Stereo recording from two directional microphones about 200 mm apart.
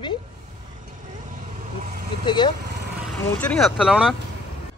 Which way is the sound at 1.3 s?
40° right (ahead or behind).